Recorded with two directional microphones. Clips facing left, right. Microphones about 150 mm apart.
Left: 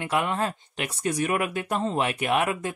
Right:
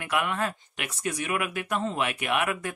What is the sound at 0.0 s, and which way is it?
Speech, 30° left (ahead or behind).